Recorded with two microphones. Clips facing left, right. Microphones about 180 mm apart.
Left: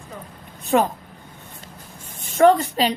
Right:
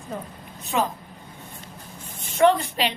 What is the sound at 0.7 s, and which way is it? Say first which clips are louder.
Speech: left 6 dB; 50° left (ahead or behind).